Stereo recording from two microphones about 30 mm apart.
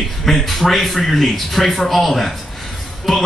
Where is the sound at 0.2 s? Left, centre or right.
Centre.